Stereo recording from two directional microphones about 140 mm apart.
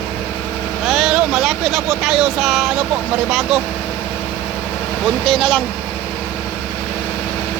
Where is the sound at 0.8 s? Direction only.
Centre (ahead or behind).